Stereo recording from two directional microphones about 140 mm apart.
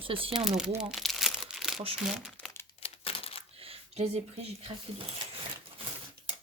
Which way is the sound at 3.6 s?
45° right (ahead or behind).